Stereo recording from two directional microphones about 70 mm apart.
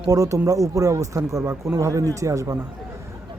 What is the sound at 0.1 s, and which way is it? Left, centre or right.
Speech, right.